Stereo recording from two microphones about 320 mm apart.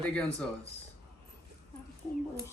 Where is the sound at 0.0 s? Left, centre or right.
Centre.